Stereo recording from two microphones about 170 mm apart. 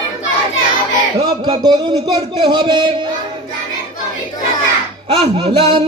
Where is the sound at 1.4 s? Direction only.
25° right (ahead or behind).